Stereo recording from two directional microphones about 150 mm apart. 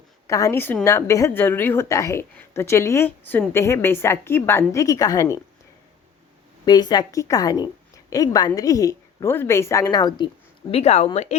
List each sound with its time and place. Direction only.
0.3 s a woman's voice: 20° left (ahead or behind)
6.7 s a woman's voice: 30° left (ahead or behind)
10.7 s speech: 45° left (ahead or behind)